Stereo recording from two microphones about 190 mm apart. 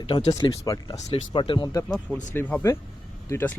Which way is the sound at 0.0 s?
25° left (ahead or behind).